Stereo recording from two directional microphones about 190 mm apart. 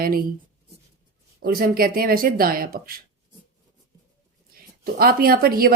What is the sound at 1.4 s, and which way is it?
A woman's voice, 50° right (ahead or behind).